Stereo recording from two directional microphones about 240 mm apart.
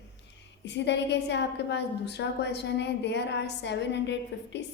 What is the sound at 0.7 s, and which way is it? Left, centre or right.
A woman's voice, left.